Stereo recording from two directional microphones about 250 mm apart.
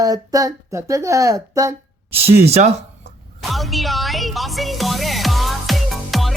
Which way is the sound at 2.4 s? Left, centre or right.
Right.